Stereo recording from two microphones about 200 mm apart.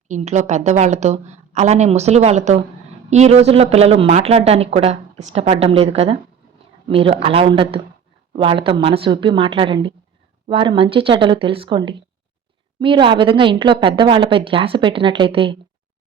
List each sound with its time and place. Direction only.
0.1 s a woman's voice: 35° right (ahead or behind)